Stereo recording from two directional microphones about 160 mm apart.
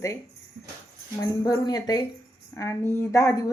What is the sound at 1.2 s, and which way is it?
A woman's voice, 20° left (ahead or behind).